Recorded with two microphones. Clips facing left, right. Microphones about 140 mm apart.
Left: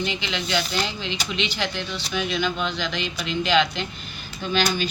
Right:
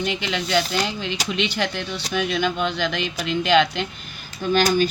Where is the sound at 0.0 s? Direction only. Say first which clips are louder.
Right 3 dB; 55° right (ahead or behind).